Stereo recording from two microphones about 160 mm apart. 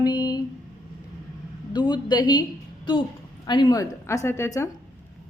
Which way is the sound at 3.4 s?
25° left (ahead or behind).